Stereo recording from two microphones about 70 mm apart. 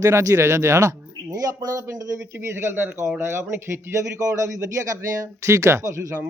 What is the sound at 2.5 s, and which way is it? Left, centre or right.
Speech, right.